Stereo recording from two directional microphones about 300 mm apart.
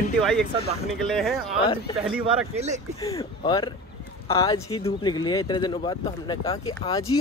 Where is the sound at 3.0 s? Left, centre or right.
Centre.